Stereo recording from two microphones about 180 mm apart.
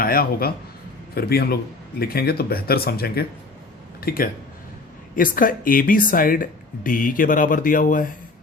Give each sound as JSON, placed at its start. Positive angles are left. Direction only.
{"t": 0.0, "sound": "speech", "side_deg": 55}